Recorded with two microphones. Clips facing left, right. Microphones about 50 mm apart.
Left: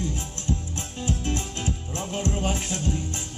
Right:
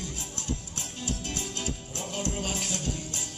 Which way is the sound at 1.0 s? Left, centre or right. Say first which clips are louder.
Left 6 dB; left.